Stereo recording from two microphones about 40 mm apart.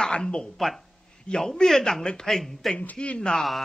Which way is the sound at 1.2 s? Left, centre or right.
Centre.